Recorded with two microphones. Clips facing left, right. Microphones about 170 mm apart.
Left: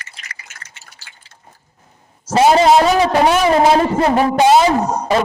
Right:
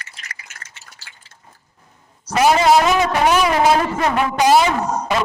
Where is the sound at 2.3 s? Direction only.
30° left (ahead or behind).